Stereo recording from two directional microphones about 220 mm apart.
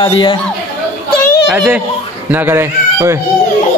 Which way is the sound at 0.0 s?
20° left (ahead or behind).